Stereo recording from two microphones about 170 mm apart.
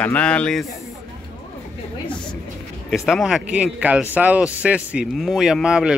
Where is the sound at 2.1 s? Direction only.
5° left (ahead or behind).